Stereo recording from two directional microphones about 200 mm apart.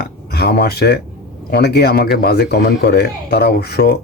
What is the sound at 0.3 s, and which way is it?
Speech, 50° left (ahead or behind).